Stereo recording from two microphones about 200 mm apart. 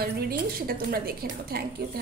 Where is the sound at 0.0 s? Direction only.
50° right (ahead or behind).